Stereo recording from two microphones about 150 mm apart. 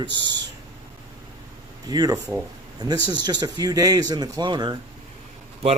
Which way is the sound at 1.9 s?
25° right (ahead or behind).